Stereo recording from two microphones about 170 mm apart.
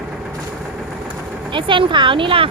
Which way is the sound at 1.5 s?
30° right (ahead or behind).